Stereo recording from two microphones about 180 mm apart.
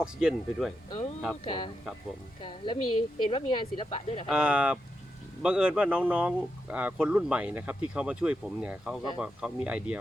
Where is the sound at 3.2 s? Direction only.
25° left (ahead or behind).